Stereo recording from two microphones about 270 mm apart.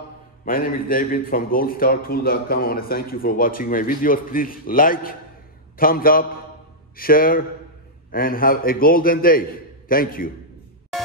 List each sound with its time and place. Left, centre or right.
0.5 s a man's voice: left